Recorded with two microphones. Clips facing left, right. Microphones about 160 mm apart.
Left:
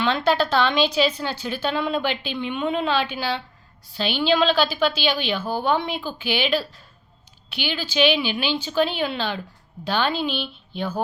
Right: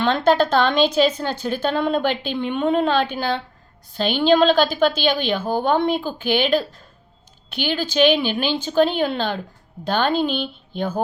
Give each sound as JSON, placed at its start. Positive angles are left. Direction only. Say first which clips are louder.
{"t": 0.0, "sound": "speech", "louder": "right 4 dB", "side_deg": -45}